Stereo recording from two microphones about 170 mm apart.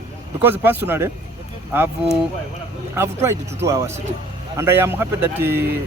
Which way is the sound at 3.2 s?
15° right (ahead or behind).